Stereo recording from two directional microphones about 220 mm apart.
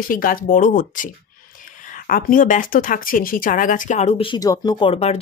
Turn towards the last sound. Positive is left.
turn(degrees=25)  # may be behind; listen again after turning